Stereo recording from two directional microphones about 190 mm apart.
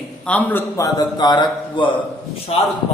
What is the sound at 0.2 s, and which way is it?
A man's voice, 10° left (ahead or behind).